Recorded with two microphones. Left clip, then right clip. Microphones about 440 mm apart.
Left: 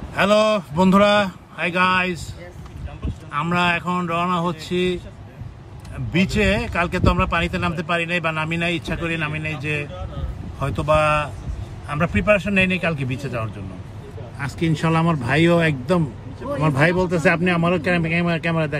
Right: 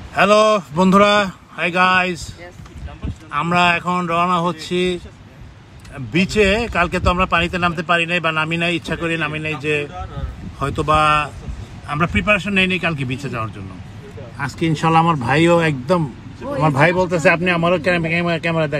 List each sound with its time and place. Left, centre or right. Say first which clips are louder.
0.1 s speech: right 4 dB; centre
3.3 s speech: right 5 dB; centre